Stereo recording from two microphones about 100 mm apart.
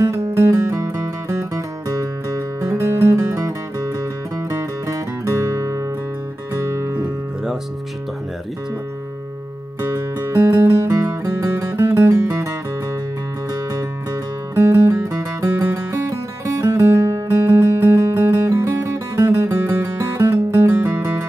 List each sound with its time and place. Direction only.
0.0 s music: 30° right (ahead or behind)
3.3 s music: 35° right (ahead or behind)
9.8 s music: 30° right (ahead or behind)
14.5 s music: 25° right (ahead or behind)
20.6 s music: 20° right (ahead or behind)